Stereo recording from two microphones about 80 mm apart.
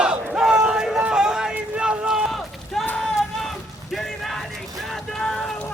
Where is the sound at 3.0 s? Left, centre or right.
Centre.